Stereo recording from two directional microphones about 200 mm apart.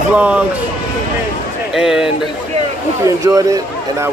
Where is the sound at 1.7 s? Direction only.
5° right (ahead or behind).